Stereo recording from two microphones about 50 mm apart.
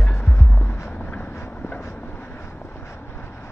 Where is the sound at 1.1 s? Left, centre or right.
Left.